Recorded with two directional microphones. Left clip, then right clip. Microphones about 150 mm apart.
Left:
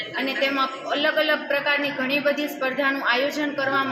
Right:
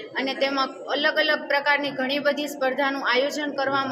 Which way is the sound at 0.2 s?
35° right (ahead or behind).